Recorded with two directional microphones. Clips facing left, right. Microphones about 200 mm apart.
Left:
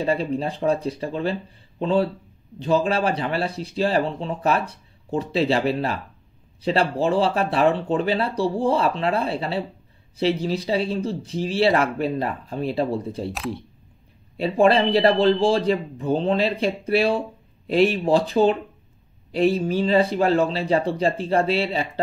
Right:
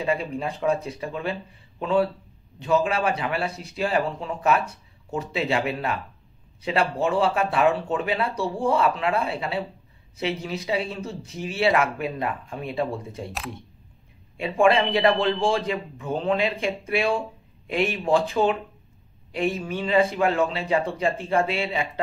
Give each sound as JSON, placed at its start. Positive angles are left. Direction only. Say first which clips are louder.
{"t": 0.0, "sound": "speech", "louder": "left 3 dB", "side_deg": 35}
{"t": 13.3, "sound": "speech", "louder": "left 6 dB", "side_deg": 0}
{"t": 14.3, "sound": "speech", "louder": "left 2 dB", "side_deg": 35}